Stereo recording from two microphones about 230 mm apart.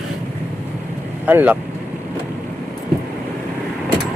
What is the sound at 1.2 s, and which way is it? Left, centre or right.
Speech, centre.